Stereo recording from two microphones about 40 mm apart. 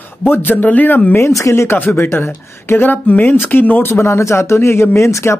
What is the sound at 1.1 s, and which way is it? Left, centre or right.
Speech, left.